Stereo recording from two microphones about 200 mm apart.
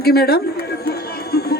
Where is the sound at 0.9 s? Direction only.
50° left (ahead or behind).